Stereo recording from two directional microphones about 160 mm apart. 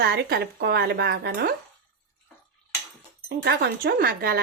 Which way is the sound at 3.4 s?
90° right.